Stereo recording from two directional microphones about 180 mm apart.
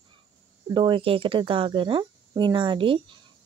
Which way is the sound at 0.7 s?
25° right (ahead or behind).